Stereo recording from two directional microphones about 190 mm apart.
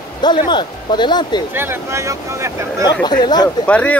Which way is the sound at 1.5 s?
15° right (ahead or behind).